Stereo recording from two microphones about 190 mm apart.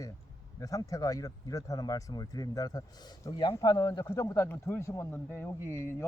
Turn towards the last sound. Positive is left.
turn(degrees=10)  # may be behind; listen again after turning